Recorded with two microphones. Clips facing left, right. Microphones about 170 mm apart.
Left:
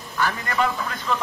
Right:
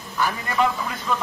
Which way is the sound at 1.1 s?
10° right (ahead or behind).